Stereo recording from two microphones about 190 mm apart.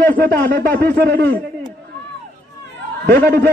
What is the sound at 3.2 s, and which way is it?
Speech, 55° right (ahead or behind).